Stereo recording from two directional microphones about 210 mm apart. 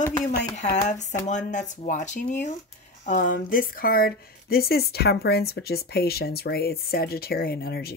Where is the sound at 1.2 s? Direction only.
35° left (ahead or behind).